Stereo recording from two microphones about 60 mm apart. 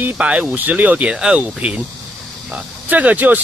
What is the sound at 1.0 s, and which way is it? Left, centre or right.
Speech, centre.